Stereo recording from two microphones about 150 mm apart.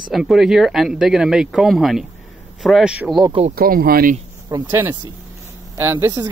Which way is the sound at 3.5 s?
75° right (ahead or behind).